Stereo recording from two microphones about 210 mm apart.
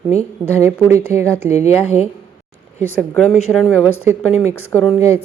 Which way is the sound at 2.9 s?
5° left (ahead or behind).